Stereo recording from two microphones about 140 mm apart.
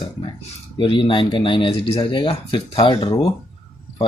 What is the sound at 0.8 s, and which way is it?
Speech, 35° left (ahead or behind).